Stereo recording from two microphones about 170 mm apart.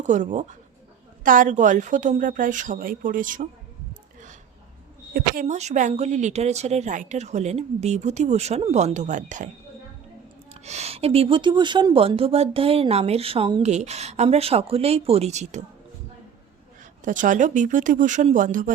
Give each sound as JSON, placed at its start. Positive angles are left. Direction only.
{"t": 0.0, "sound": "speech", "side_deg": -45}
{"t": 5.1, "sound": "speech", "side_deg": -55}
{"t": 10.5, "sound": "speech", "side_deg": -40}
{"t": 17.0, "sound": "speech", "side_deg": -50}